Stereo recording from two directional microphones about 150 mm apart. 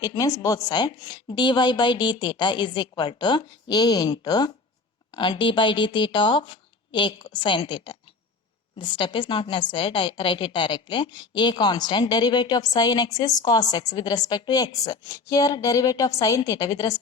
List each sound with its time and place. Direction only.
0.0 s a woman's voice: 25° left (ahead or behind)